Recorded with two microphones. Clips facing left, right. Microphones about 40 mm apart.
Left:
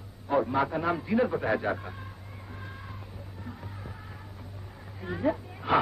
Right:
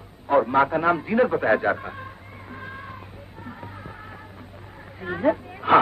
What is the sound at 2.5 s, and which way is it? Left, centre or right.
Music, right.